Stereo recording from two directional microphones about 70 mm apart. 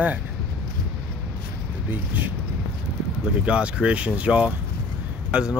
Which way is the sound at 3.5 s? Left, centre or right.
Centre.